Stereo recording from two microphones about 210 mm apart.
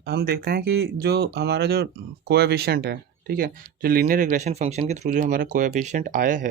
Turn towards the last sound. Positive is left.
turn(degrees=-40)  # may be behind; listen again after turning